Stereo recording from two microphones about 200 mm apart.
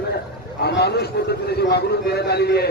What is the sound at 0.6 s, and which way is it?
A man's voice, 55° left (ahead or behind).